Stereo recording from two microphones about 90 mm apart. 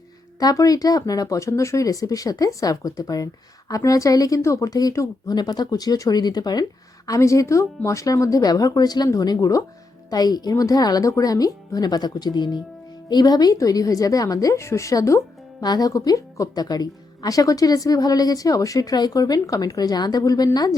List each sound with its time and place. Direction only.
0.3 s speech: 40° left (ahead or behind)
7.1 s speech: 35° left (ahead or behind)
15.6 s speech: 45° left (ahead or behind)